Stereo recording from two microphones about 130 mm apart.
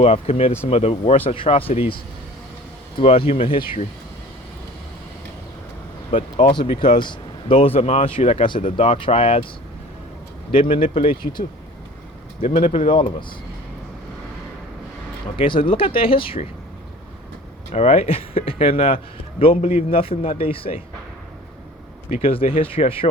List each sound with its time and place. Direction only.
0.0 s speech: 50° left (ahead or behind)
3.0 s speech: 45° left (ahead or behind)
6.5 s speech: 35° left (ahead or behind)
10.5 s speech: 45° left (ahead or behind)
12.6 s speech: 45° left (ahead or behind)
15.4 s speech: 40° left (ahead or behind)
17.7 s speech: 50° left (ahead or behind)
22.1 s speech: 45° left (ahead or behind)